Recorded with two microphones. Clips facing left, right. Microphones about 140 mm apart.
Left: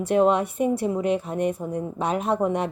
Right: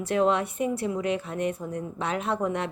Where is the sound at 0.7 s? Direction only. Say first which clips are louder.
Left 4 dB; 40° left (ahead or behind).